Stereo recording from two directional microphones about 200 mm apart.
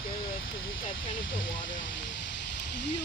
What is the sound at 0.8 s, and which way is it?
Speech, 75° left (ahead or behind).